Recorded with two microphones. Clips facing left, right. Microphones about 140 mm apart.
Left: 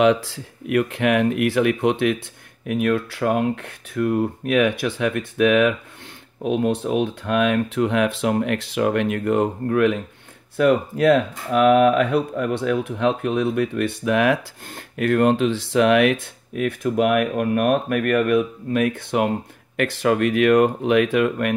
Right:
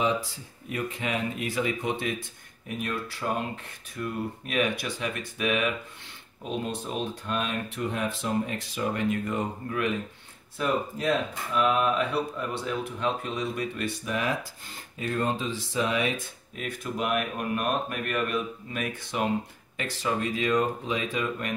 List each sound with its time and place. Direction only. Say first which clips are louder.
0.0 s speech: left 10 dB; 75° left (ahead or behind)